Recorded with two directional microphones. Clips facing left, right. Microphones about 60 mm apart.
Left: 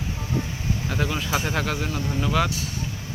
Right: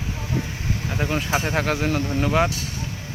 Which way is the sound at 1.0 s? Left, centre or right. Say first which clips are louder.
Right 4 dB; right.